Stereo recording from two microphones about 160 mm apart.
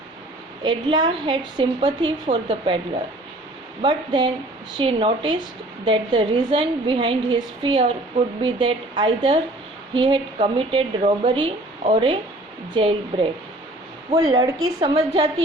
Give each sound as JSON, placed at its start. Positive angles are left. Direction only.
{"t": 0.6, "sound": "a woman's voice", "side_deg": -30}
{"t": 3.8, "sound": "a woman's voice", "side_deg": -30}
{"t": 14.9, "sound": "a woman's voice", "side_deg": -35}